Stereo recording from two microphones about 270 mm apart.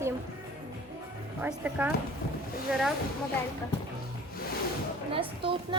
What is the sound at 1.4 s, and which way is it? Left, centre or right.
Speech, centre.